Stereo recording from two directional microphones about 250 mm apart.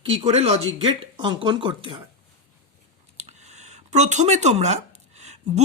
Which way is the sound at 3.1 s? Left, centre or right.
Right.